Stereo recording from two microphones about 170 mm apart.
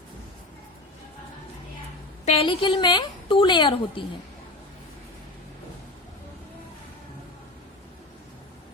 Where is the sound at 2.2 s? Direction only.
35° left (ahead or behind).